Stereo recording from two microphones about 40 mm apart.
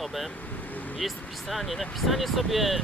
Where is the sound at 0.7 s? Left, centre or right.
Left.